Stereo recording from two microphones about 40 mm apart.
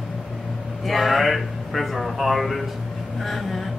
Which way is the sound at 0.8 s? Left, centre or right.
Centre.